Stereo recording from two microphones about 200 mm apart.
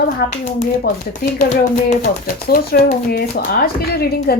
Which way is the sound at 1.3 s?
35° left (ahead or behind).